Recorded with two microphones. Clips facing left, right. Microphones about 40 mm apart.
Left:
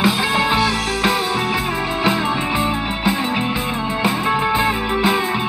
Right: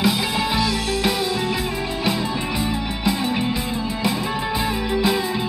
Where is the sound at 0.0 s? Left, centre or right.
Left.